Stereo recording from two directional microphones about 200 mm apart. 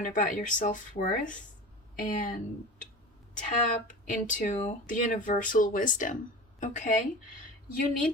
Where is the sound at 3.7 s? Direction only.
40° left (ahead or behind).